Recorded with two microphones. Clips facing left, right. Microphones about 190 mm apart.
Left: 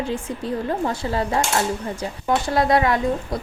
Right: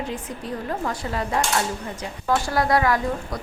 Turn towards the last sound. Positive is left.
turn(degrees=25)  # may be behind; listen again after turning